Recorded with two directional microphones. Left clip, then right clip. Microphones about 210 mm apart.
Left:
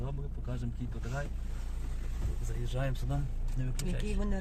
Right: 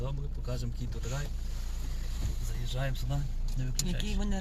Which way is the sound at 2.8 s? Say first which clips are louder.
Even; 50° left (ahead or behind).